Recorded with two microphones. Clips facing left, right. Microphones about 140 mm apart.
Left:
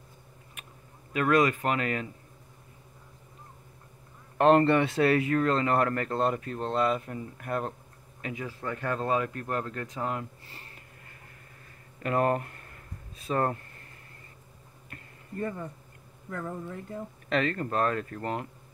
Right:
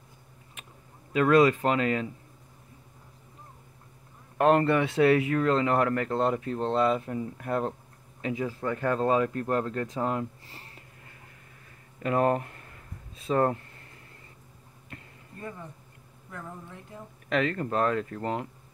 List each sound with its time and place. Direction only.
1.1 s speech: 25° right (ahead or behind)
4.4 s speech: 5° right (ahead or behind); by 10.8 s 25° right (ahead or behind)
12.0 s speech: 20° right (ahead or behind)
17.3 s speech: 15° right (ahead or behind)